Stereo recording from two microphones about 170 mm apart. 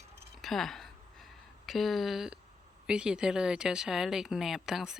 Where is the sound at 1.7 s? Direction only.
Centre (ahead or behind).